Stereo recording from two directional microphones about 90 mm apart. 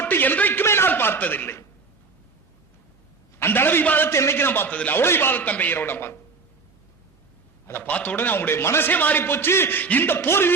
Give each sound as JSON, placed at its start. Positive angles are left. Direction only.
{"t": 0.0, "sound": "a man's voice", "side_deg": 20}
{"t": 3.3, "sound": "a man's voice", "side_deg": 25}
{"t": 7.7, "sound": "a man's voice", "side_deg": 15}